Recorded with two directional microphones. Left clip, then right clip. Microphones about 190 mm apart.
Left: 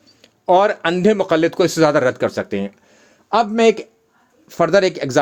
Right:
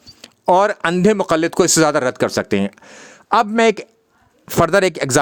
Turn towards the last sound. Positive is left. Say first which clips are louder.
# even
turn(degrees=-45)  # may be behind; listen again after turning